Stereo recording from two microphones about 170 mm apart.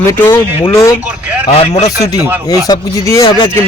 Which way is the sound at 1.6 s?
40° left (ahead or behind).